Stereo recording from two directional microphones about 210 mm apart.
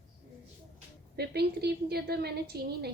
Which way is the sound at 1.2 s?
50° right (ahead or behind).